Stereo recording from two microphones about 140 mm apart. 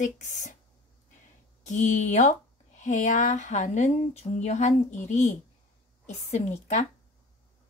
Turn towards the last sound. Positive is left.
turn(degrees=55)  # may be behind; listen again after turning